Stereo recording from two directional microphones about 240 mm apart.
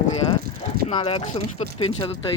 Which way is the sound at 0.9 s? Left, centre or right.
Left.